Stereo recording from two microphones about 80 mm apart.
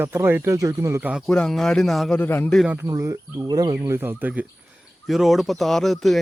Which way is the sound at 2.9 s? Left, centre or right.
Right.